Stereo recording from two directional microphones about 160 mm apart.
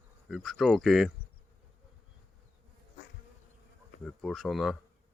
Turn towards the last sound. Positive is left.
turn(degrees=0)  # may be behind; listen again after turning